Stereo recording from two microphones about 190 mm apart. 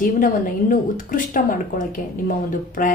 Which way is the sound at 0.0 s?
45° left (ahead or behind).